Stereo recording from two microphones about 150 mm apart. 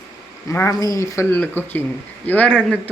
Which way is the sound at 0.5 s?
20° left (ahead or behind).